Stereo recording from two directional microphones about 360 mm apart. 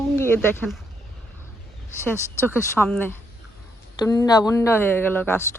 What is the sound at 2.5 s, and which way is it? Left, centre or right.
Speech, centre.